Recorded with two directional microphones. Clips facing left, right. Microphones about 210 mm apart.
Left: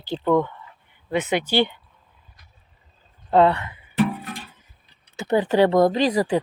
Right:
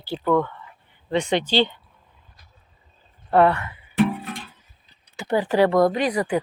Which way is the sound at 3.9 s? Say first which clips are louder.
Right 1 dB; centre (ahead or behind).